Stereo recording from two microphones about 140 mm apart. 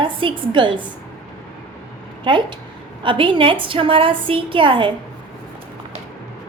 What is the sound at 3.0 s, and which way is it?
A woman's voice, 35° right (ahead or behind).